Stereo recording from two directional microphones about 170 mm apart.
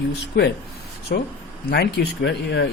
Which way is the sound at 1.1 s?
60° left (ahead or behind).